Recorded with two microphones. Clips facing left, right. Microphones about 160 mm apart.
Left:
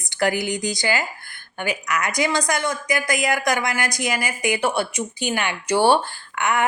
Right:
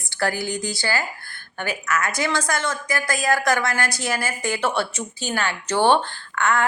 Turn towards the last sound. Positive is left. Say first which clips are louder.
# right 1 dB
turn(degrees=15)  # may be behind; listen again after turning